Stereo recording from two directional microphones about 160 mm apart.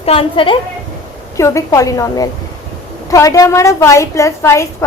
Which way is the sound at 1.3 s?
20° left (ahead or behind).